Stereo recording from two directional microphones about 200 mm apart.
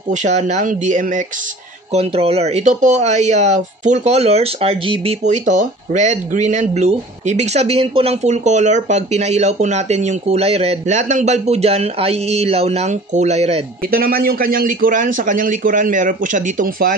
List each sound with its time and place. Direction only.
0.1 s speech: 35° right (ahead or behind)
13.8 s a man's voice: 50° right (ahead or behind)